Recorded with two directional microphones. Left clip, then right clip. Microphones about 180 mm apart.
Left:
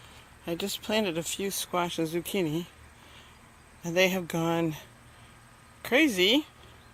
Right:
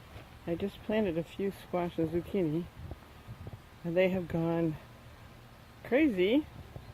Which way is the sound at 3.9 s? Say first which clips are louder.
Left 4 dB; 25° left (ahead or behind).